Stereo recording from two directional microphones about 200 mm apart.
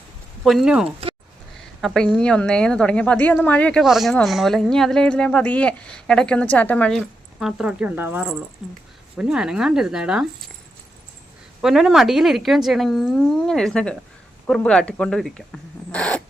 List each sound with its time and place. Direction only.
0.4 s a woman's voice: centre (ahead or behind)
11.6 s a woman's voice: centre (ahead or behind)